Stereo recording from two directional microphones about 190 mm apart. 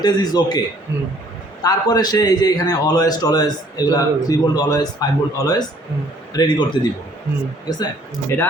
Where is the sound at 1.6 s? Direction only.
20° left (ahead or behind).